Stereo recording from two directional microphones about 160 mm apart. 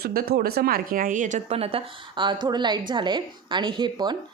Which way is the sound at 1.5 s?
35° right (ahead or behind).